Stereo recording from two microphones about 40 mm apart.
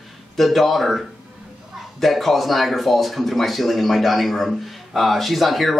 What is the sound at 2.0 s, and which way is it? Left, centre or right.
Speech, centre.